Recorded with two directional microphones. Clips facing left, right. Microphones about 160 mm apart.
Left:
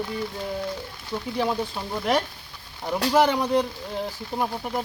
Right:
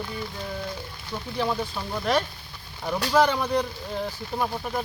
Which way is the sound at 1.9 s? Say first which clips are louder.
Left 1 dB; 15° left (ahead or behind).